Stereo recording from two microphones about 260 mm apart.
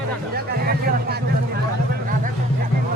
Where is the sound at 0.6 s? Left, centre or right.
Right.